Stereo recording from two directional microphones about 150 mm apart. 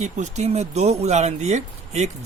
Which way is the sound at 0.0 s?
50° right (ahead or behind).